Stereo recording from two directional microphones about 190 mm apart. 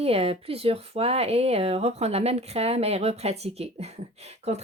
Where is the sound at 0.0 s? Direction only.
30° right (ahead or behind).